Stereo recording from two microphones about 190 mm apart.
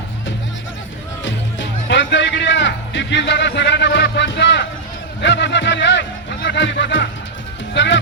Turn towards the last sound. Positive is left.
turn(degrees=70)  # may be behind; listen again after turning